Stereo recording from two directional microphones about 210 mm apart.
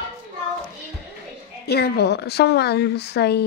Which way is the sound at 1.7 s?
50° left (ahead or behind).